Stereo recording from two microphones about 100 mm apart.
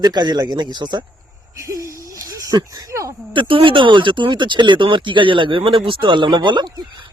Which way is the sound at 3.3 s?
60° right (ahead or behind).